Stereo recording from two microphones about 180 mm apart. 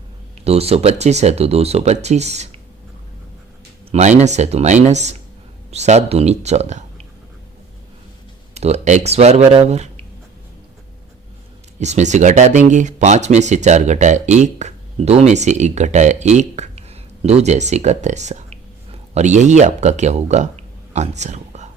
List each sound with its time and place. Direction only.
0.4 s speech: 35° right (ahead or behind)
3.9 s speech: 40° right (ahead or behind)
8.5 s speech: 35° right (ahead or behind)
11.8 s speech: 40° right (ahead or behind)